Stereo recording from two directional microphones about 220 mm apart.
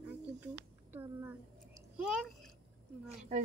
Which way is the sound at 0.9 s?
10° right (ahead or behind).